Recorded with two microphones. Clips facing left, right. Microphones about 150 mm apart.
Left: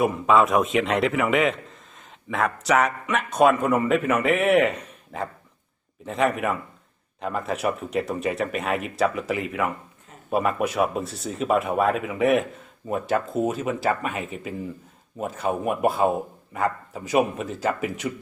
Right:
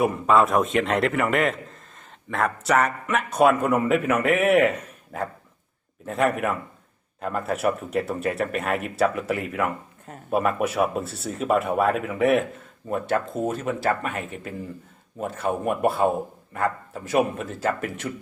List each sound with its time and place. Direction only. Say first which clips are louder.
0.0 s a man's voice: even; centre (ahead or behind)